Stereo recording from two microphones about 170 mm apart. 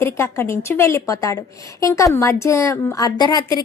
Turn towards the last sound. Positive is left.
turn(degrees=25)  # may be behind; listen again after turning